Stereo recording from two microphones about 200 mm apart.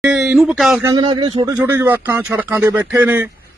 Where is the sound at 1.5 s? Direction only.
10° right (ahead or behind).